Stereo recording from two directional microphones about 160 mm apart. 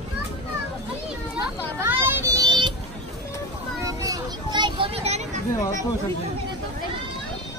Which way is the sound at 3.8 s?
20° right (ahead or behind).